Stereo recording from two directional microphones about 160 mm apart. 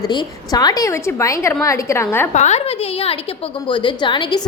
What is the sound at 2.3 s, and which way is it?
Speech, 45° left (ahead or behind).